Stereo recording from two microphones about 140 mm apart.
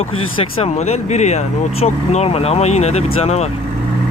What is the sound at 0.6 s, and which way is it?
Speech, 50° left (ahead or behind).